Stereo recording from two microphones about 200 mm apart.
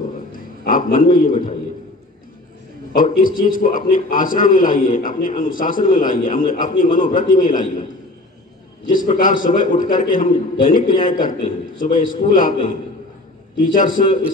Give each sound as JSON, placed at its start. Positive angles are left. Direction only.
{"t": 0.3, "sound": "a man's voice", "side_deg": 45}
{"t": 2.9, "sound": "a man's voice", "side_deg": 45}
{"t": 8.8, "sound": "a man's voice", "side_deg": 40}
{"t": 13.6, "sound": "a man's voice", "side_deg": 40}